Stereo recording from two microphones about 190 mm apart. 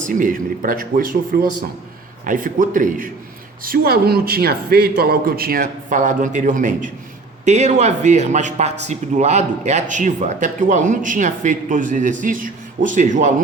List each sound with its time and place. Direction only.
0.0 s a man's voice: 45° right (ahead or behind)